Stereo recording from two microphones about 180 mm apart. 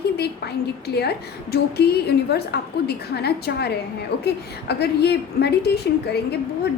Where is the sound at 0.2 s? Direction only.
65° left (ahead or behind).